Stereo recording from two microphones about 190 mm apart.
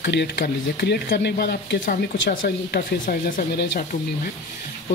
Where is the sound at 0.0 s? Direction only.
60° left (ahead or behind).